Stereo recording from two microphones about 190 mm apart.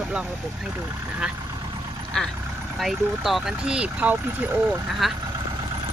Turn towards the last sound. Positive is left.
turn(degrees=-5)  # may be behind; listen again after turning